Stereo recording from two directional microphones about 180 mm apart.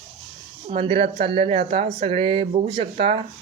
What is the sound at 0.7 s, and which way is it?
Speech, 35° right (ahead or behind).